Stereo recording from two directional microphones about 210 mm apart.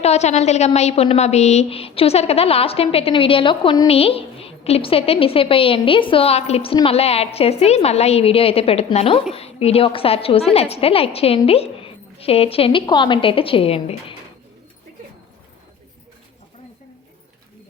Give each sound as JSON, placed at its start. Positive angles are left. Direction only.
{"t": 0.0, "sound": "a woman's voice", "side_deg": 30}